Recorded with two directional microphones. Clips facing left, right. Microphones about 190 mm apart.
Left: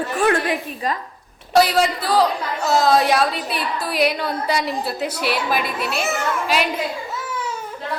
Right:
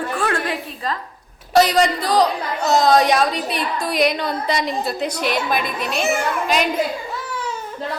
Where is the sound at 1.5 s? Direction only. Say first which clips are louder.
Right 1 dB; 5° left (ahead or behind).